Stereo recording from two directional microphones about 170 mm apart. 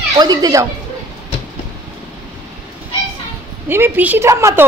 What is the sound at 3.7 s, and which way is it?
Speech, 15° right (ahead or behind).